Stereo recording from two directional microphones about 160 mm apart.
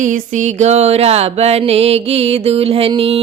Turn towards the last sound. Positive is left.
turn(degrees=-35)  # may be behind; listen again after turning